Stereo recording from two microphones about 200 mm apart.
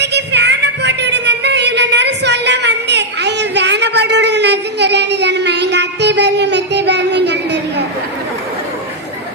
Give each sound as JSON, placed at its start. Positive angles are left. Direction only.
{"t": 0.0, "sound": "music", "side_deg": -60}